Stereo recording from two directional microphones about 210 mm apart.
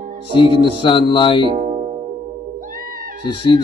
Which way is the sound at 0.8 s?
25° left (ahead or behind).